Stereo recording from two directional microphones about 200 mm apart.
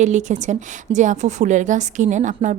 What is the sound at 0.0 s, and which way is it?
A woman's voice, 35° right (ahead or behind).